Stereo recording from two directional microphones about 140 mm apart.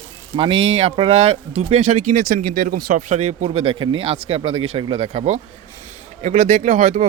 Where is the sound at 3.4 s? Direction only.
40° right (ahead or behind).